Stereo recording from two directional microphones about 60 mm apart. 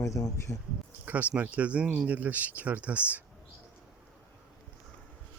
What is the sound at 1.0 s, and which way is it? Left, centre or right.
Speech, right.